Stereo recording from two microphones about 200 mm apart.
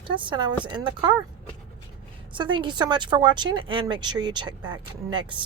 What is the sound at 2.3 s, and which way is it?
Speech, 25° right (ahead or behind).